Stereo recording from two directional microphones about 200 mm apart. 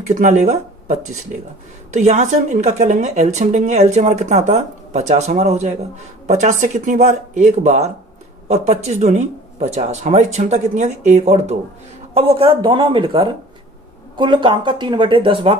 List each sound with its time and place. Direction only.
0.1 s speech: 35° right (ahead or behind)